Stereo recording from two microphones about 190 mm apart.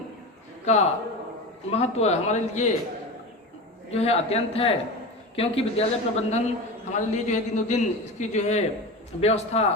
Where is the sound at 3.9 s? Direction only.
35° left (ahead or behind).